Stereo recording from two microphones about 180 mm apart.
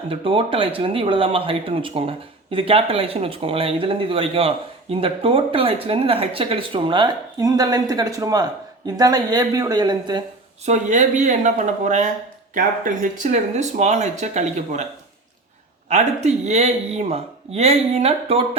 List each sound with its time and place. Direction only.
0.1 s a woman's voice: 30° right (ahead or behind)
10.7 s speech: 40° right (ahead or behind)
15.9 s speech: 40° right (ahead or behind)